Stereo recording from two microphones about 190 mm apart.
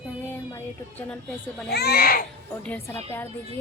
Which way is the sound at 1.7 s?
55° left (ahead or behind).